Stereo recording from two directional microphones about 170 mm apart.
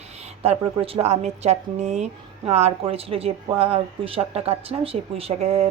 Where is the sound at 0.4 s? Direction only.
35° right (ahead or behind).